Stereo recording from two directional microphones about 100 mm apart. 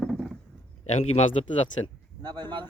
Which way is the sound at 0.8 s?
90° left.